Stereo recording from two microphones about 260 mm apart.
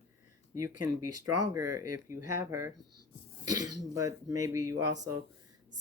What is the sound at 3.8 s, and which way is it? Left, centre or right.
Speech, centre.